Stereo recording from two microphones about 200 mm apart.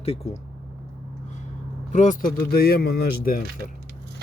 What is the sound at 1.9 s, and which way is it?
Speech, 40° left (ahead or behind).